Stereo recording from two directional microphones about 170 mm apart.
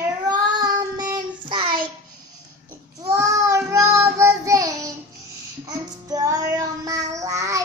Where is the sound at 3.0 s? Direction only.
20° right (ahead or behind).